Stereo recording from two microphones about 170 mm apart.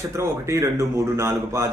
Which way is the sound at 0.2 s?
15° right (ahead or behind).